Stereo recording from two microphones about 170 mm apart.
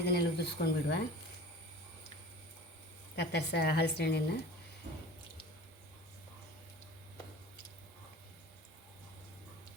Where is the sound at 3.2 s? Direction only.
80° left.